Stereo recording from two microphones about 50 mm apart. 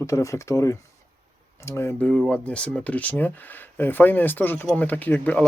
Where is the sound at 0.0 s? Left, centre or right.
Left.